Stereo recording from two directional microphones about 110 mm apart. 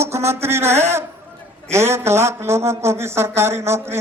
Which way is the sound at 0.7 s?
80° right.